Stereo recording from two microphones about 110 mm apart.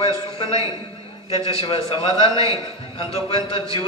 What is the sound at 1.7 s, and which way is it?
Speech, 50° left (ahead or behind).